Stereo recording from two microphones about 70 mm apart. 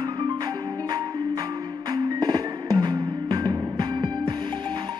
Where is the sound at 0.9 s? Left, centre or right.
Right.